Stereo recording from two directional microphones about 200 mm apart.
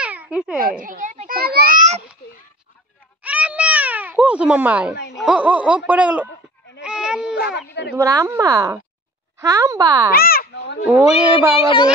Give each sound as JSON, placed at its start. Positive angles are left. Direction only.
{"t": 0.0, "sound": "a sound", "side_deg": -5}
{"t": 0.6, "sound": "a child's voice", "side_deg": -45}
{"t": 3.2, "sound": "cat", "side_deg": -5}
{"t": 5.1, "sound": "speech", "side_deg": -5}
{"t": 6.8, "sound": "goat", "side_deg": -5}
{"t": 7.9, "sound": "speech", "side_deg": -15}
{"t": 10.1, "sound": "a sound", "side_deg": 50}
{"t": 11.1, "sound": "speech", "side_deg": -10}
{"t": 11.6, "sound": "speech", "side_deg": 25}